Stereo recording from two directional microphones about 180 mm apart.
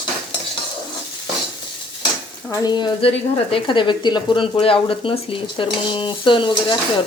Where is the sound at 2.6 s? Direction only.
25° left (ahead or behind).